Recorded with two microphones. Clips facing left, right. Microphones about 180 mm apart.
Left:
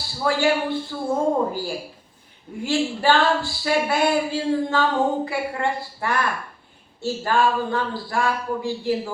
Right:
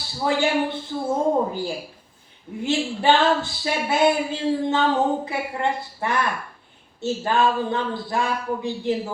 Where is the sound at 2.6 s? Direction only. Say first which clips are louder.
Even; 20° right (ahead or behind).